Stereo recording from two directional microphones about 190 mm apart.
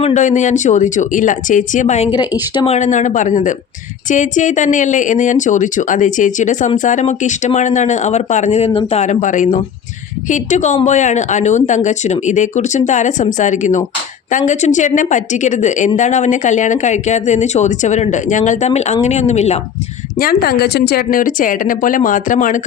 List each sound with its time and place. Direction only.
0.0 s speech: 40° left (ahead or behind)
20.1 s a woman's voice: 50° left (ahead or behind)